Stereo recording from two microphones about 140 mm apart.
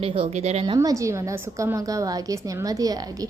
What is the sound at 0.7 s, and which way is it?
A woman's voice, 20° right (ahead or behind).